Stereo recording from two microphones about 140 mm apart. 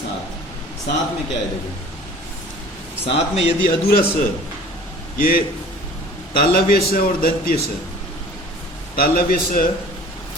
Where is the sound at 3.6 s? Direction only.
90° left.